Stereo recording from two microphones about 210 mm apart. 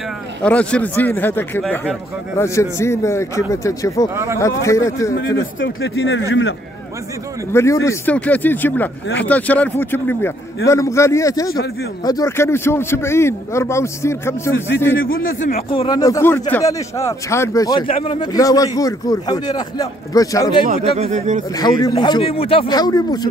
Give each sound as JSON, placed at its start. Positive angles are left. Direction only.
{"t": 0.4, "sound": "speech", "side_deg": 5}
{"t": 4.1, "sound": "speech", "side_deg": -15}
{"t": 4.4, "sound": "speech", "side_deg": 15}
{"t": 5.6, "sound": "speech", "side_deg": 60}
{"t": 7.5, "sound": "speech", "side_deg": 15}
{"t": 15.0, "sound": "a man's voice", "side_deg": 40}
{"t": 15.7, "sound": "speech", "side_deg": 20}
{"t": 20.6, "sound": "speech", "side_deg": -35}
{"t": 21.8, "sound": "speech", "side_deg": 20}